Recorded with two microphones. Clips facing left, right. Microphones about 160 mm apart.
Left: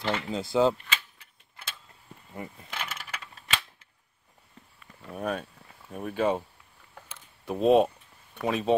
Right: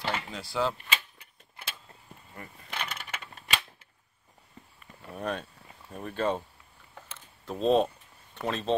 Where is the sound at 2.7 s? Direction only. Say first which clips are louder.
Right 2 dB; 5° left (ahead or behind).